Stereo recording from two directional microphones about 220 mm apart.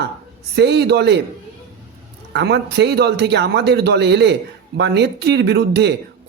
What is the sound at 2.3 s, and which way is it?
Speech, 50° right (ahead or behind).